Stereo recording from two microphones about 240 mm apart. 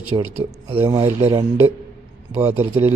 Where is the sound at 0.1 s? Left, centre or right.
Centre.